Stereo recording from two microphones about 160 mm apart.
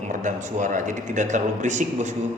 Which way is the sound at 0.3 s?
55° right (ahead or behind).